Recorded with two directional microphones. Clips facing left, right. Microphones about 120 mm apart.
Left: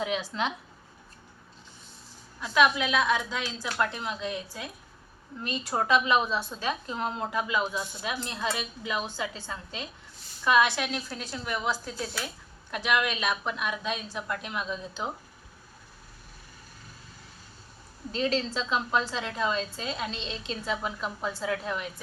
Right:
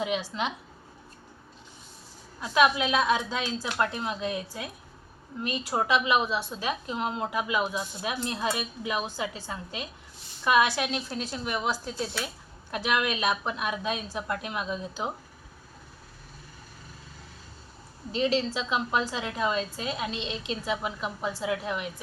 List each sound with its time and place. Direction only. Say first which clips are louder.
0.0 s speech: right 1 dB; 5° right (ahead or behind)
2.4 s a woman's voice: right 1 dB; 20° right (ahead or behind)
18.2 s speech: right 2 dB; 5° right (ahead or behind)